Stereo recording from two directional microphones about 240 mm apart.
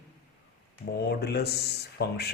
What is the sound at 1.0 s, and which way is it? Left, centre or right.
Speech, left.